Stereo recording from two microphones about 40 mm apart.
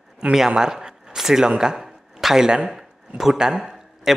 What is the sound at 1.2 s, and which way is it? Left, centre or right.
Zipper, centre.